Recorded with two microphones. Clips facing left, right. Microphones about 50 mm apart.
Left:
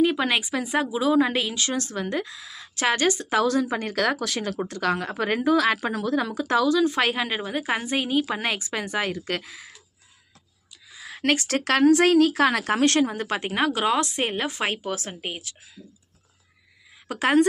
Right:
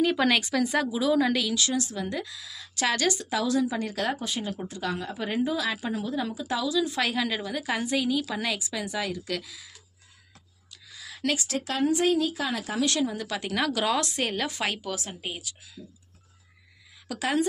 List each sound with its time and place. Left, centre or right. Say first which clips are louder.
0.0 s speech: left 2 dB; centre; by 1.8 s left
1.8 s speech: left 3 dB; left
4.0 s speech: left 7 dB; left
10.9 s a sound: left 4 dB; left
11.2 s speech: left 6 dB; left
17.1 s speech: left 6 dB; left